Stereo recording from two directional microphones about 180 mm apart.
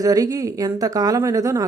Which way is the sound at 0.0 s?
20° right (ahead or behind).